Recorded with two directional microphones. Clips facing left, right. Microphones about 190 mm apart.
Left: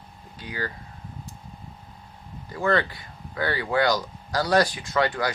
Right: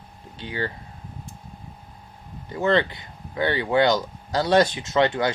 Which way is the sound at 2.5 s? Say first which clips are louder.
Right 3 dB; 20° right (ahead or behind).